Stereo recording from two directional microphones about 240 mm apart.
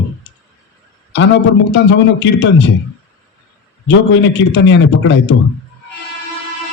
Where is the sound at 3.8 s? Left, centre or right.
Left.